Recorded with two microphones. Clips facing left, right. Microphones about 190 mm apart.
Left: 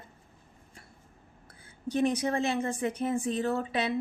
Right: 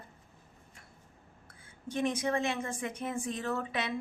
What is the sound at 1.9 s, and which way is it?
A woman's voice, 35° left (ahead or behind).